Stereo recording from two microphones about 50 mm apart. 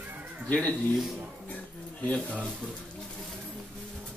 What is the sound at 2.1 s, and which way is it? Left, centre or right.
Speech, left.